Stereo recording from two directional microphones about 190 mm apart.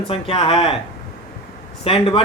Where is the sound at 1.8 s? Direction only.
30° left (ahead or behind).